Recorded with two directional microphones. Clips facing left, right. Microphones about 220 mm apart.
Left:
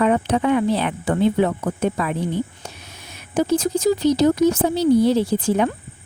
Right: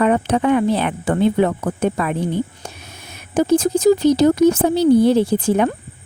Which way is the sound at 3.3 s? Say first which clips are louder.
Right 4 dB; 50° right (ahead or behind).